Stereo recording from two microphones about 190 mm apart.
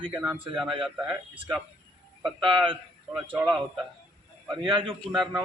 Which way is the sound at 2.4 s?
25° right (ahead or behind).